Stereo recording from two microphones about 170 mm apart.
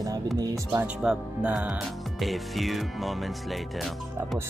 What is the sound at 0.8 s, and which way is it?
Speech, 5° right (ahead or behind).